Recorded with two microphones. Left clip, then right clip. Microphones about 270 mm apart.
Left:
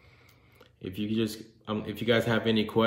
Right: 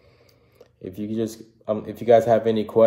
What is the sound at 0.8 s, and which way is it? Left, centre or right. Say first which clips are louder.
Speech: right 4 dB; centre.